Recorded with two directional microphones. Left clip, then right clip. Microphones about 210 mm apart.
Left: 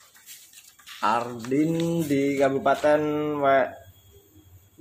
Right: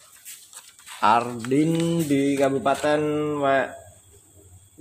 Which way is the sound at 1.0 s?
40° right (ahead or behind).